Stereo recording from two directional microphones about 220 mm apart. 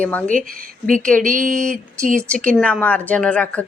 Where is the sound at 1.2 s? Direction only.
35° right (ahead or behind).